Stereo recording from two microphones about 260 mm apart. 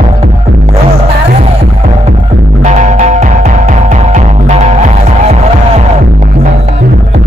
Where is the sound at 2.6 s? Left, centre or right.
Right.